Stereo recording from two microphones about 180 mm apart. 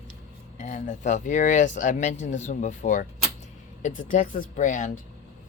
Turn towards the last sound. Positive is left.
turn(degrees=45)  # may be behind; listen again after turning